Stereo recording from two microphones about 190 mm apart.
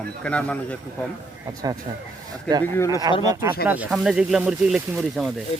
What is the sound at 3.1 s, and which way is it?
Speech, 20° right (ahead or behind).